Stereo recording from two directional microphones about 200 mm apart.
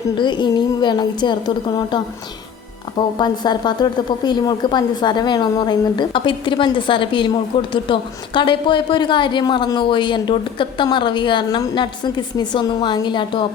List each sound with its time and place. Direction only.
0.2 s a woman's voice: 20° left (ahead or behind)
3.2 s a woman's voice: 20° left (ahead or behind)